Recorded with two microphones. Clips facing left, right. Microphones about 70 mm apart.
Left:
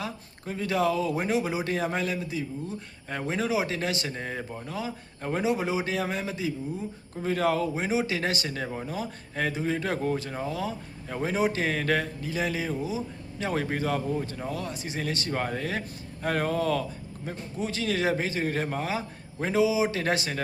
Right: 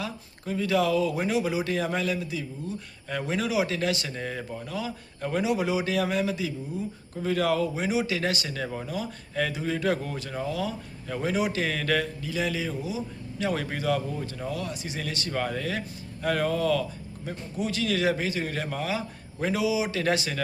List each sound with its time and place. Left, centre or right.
0.0 s a man's voice: left
8.6 s speech: centre
8.9 s a man's voice: left